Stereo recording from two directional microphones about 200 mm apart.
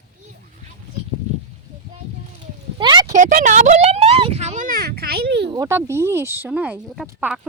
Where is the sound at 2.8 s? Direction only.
20° right (ahead or behind).